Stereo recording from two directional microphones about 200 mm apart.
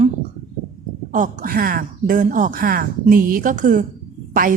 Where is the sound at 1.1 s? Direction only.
40° right (ahead or behind).